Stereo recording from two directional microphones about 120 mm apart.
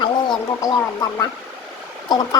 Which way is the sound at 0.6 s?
30° left (ahead or behind).